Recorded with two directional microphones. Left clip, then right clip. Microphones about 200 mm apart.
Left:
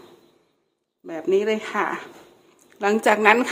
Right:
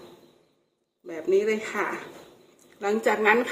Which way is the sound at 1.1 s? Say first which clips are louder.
Left 2 dB; 45° left (ahead or behind).